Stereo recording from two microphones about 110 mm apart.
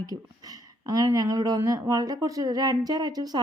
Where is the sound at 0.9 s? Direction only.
35° right (ahead or behind).